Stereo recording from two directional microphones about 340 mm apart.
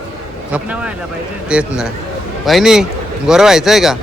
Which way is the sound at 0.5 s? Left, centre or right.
Centre.